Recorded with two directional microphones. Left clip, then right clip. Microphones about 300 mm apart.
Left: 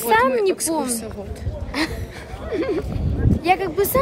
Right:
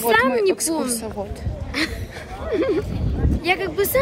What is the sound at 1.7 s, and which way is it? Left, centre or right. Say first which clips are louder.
Speech: even; centre.